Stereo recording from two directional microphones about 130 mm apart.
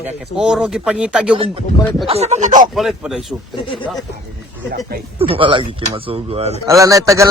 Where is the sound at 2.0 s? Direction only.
55° right (ahead or behind); by 2.6 s 70° right (ahead or behind).